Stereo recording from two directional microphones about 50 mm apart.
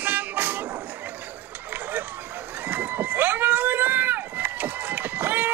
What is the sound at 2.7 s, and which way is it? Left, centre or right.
Run, right.